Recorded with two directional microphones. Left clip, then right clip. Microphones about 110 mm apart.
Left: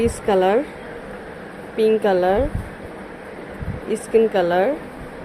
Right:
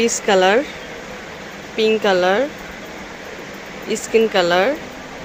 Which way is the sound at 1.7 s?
5° left (ahead or behind).